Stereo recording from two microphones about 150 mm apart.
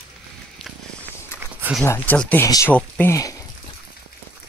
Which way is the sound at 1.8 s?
10° left (ahead or behind).